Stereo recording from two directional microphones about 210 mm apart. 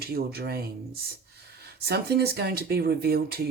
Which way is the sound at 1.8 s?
50° right (ahead or behind).